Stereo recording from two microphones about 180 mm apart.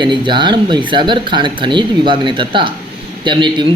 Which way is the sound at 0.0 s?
25° right (ahead or behind).